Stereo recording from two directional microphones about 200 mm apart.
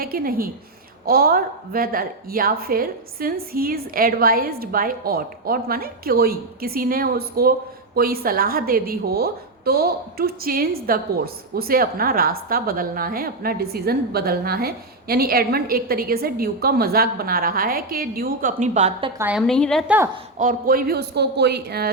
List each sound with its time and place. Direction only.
0.0 s a woman's voice: 45° right (ahead or behind); by 19.1 s 30° right (ahead or behind)
19.2 s a woman's voice: 5° right (ahead or behind)
20.4 s a woman's voice: 45° right (ahead or behind)